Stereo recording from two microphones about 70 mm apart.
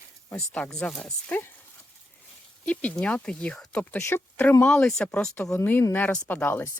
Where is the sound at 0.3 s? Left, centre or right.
Centre.